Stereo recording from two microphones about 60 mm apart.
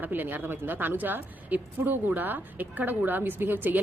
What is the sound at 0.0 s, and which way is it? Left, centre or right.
A woman's voice, right.